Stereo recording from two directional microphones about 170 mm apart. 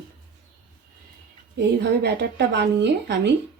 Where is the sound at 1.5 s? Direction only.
85° right.